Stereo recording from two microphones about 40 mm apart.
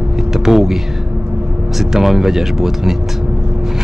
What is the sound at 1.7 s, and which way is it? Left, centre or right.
Speech, centre.